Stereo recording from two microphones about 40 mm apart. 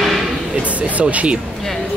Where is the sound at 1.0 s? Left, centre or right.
Right.